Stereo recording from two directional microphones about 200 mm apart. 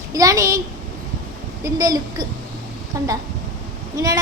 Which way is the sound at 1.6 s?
20° right (ahead or behind).